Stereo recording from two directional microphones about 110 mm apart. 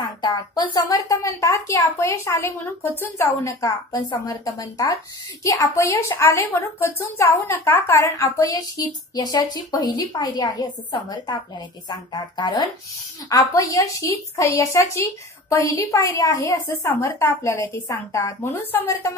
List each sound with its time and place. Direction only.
0.0 s speech: 40° left (ahead or behind)
5.4 s a woman's voice: 30° left (ahead or behind)
16.6 s speech: 20° left (ahead or behind)